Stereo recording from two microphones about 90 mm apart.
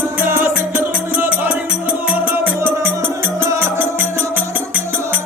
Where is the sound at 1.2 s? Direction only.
15° right (ahead or behind).